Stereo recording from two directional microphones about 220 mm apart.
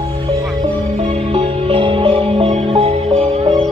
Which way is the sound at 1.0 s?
25° right (ahead or behind).